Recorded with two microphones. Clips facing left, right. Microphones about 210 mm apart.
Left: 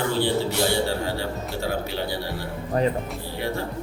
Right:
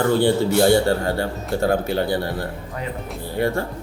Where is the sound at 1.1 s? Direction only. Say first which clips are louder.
Right 5 dB; 50° right (ahead or behind).